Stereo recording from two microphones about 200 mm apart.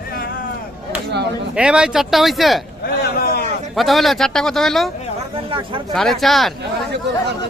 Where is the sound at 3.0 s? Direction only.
50° left (ahead or behind).